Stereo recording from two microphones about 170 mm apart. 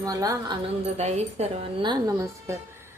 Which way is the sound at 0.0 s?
20° right (ahead or behind).